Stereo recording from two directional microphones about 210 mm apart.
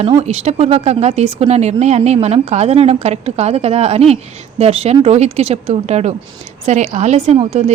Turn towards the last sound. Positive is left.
turn(degrees=-30)  # may be behind; listen again after turning